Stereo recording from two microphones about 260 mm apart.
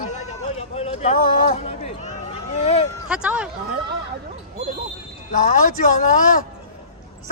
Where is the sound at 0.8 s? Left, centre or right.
Left.